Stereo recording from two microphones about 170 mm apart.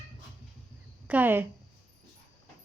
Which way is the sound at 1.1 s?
10° right (ahead or behind).